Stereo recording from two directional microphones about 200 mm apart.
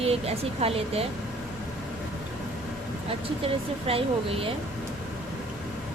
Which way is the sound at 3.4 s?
30° right (ahead or behind).